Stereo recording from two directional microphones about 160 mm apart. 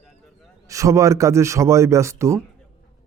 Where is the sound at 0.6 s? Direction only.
20° right (ahead or behind).